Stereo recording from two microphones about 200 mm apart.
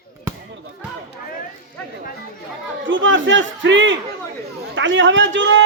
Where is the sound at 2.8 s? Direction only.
70° right (ahead or behind).